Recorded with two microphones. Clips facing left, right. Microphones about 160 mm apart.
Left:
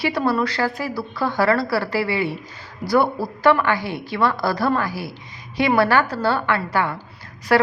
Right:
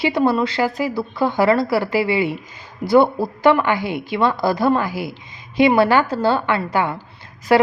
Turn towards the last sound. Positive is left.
turn(degrees=-20)  # may be behind; listen again after turning